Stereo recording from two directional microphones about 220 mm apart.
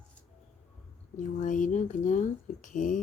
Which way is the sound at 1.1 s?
35° left (ahead or behind).